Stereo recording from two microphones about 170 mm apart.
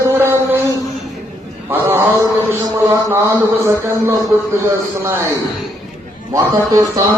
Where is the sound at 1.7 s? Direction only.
15° right (ahead or behind).